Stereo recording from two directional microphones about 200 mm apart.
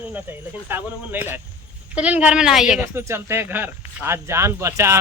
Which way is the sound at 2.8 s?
10° right (ahead or behind).